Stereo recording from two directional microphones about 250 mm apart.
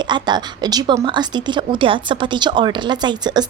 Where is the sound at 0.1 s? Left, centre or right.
Centre.